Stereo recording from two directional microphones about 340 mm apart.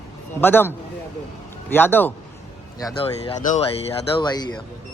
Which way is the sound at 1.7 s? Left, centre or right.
Centre.